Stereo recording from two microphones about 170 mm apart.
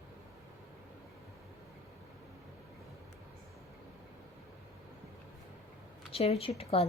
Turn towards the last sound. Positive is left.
turn(degrees=35)  # may be behind; listen again after turning